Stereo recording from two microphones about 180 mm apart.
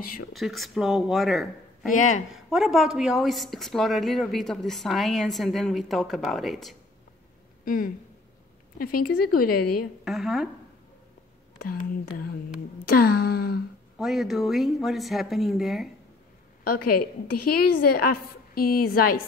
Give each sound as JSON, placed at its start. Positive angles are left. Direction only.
{"t": 0.3, "sound": "a woman's voice", "side_deg": 0}
{"t": 7.6, "sound": "a woman's voice", "side_deg": 50}
{"t": 10.0, "sound": "a woman's voice", "side_deg": 0}
{"t": 11.5, "sound": "a woman's voice", "side_deg": 50}
{"t": 13.9, "sound": "a woman's voice", "side_deg": 0}
{"t": 16.6, "sound": "a woman's voice", "side_deg": 55}